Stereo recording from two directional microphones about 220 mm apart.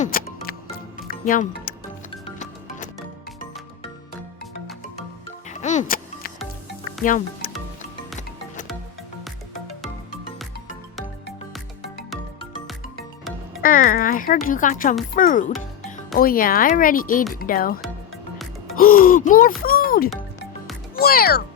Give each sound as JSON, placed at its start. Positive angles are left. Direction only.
{"t": 0.0, "sound": "music", "side_deg": 40}
{"t": 2.2, "sound": "music", "side_deg": 35}
{"t": 5.5, "sound": "music", "side_deg": 35}
{"t": 7.0, "sound": "speech", "side_deg": 35}
{"t": 13.6, "sound": "a sound", "side_deg": 40}
{"t": 14.4, "sound": "speech", "side_deg": 35}
{"t": 18.8, "sound": "speech", "side_deg": 40}